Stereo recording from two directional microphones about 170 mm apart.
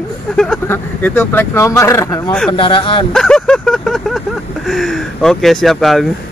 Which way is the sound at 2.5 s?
30° left (ahead or behind).